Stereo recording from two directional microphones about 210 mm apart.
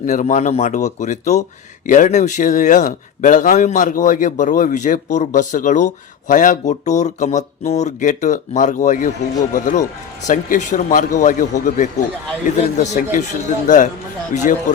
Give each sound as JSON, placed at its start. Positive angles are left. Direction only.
{"t": 0.0, "sound": "a man's voice", "side_deg": 35}